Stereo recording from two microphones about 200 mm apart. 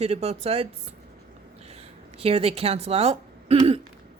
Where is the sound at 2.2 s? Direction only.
30° right (ahead or behind).